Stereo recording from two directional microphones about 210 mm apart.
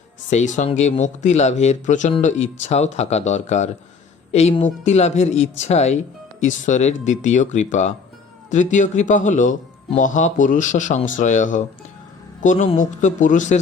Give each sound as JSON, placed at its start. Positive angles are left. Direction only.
{"t": 0.3, "sound": "a man's voice", "side_deg": 35}